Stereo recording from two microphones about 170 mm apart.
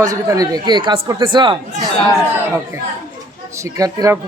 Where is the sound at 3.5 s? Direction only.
20° right (ahead or behind).